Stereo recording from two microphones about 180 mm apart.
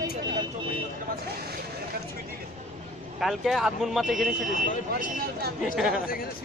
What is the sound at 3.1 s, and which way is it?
Speech, centre (ahead or behind).